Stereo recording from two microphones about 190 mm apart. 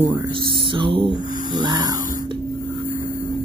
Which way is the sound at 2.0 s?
45° left (ahead or behind).